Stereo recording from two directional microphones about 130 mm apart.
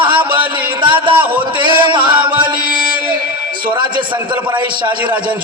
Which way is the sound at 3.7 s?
35° right (ahead or behind).